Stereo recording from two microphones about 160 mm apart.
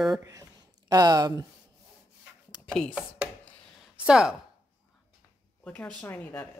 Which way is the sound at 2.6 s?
5° left (ahead or behind).